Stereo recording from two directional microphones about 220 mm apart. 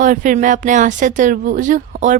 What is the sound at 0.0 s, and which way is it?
Speech, 35° right (ahead or behind).